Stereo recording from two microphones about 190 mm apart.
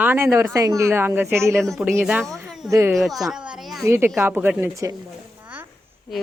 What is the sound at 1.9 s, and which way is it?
Speech, 10° right (ahead or behind).